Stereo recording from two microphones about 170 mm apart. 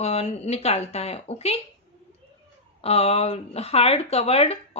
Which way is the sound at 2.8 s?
35° left (ahead or behind).